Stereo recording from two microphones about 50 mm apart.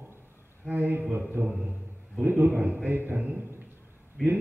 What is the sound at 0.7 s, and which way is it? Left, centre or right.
Mantra, right.